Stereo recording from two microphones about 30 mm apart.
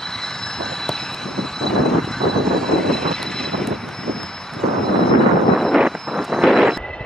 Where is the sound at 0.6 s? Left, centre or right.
Centre.